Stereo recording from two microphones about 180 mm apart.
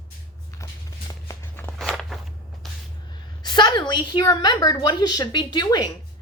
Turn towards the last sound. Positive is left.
turn(degrees=25)  # may be behind; listen again after turning